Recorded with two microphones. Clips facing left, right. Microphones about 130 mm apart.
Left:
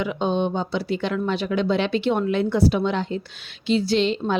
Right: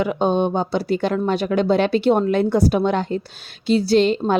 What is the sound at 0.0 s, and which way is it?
A woman's voice, 45° right (ahead or behind).